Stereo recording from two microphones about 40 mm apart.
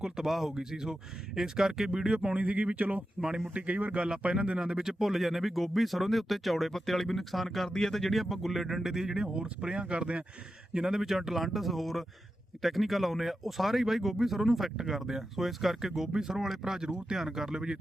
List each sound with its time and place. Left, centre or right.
0.0 s speech: centre
2.1 s speech: right
2.7 s speech: right
3.2 s speech: centre
3.5 s speech: right
3.9 s speech: right; by 7.7 s centre
7.7 s speech: centre
9.2 s speech: right
10.8 s speech: centre